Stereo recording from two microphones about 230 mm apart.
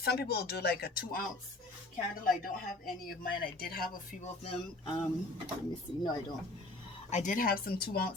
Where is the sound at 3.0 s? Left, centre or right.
Left.